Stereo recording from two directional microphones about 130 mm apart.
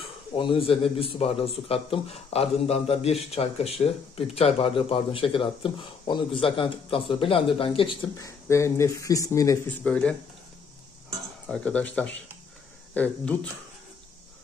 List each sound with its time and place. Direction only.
0.3 s a man's voice: 40° left (ahead or behind)
8.2 s speech: 20° left (ahead or behind)
9.7 s speech: 10° left (ahead or behind)
11.4 s speech: 5° left (ahead or behind)